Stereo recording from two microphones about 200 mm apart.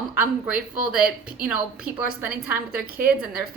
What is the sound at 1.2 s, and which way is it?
Speech, 45° right (ahead or behind).